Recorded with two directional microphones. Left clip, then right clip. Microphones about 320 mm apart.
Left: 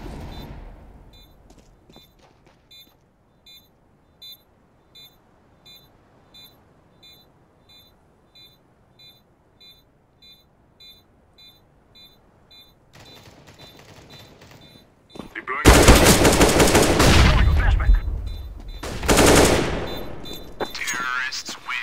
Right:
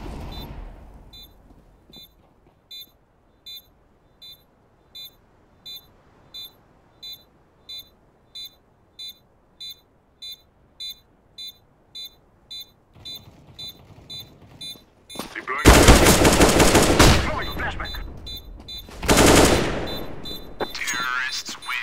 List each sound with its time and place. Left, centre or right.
0.0 s gunshot: centre
11.3 s buzzer: right
12.9 s a sound: left
15.3 s machine gun: centre